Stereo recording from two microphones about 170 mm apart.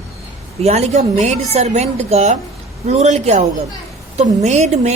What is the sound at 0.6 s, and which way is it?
A woman's voice, 40° right (ahead or behind).